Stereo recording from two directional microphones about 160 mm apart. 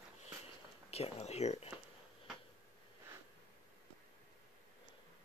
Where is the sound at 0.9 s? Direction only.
40° left (ahead or behind).